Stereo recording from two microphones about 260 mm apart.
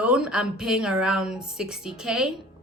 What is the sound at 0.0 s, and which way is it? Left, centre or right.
A woman's voice, centre.